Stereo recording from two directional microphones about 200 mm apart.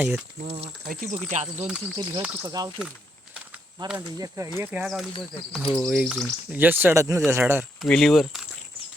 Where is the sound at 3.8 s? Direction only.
25° right (ahead or behind).